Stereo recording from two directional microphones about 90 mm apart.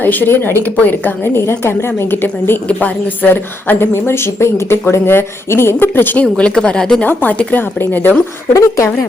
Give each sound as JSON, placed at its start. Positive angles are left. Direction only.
{"t": 0.0, "sound": "speech", "side_deg": 20}
{"t": 6.2, "sound": "speech", "side_deg": 10}
{"t": 8.5, "sound": "speech", "side_deg": 35}